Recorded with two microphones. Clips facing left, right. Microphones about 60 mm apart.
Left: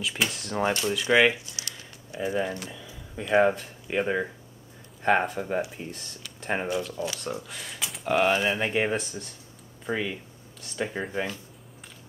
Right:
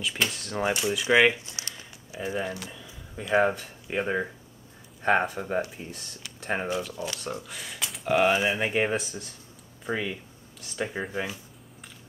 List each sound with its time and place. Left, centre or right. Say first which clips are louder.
0.0 s speech: even; centre
1.4 s a sound: even; right
2.0 s speech: left 3 dB; centre